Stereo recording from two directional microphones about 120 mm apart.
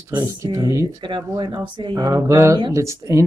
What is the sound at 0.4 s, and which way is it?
Speech, 25° right (ahead or behind).